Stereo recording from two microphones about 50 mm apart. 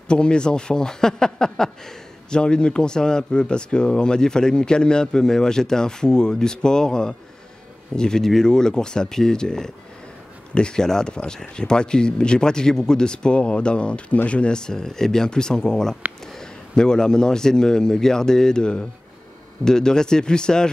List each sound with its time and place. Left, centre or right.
0.1 s a man's voice: centre